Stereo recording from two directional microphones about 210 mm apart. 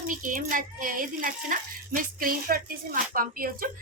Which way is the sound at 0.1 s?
40° right (ahead or behind).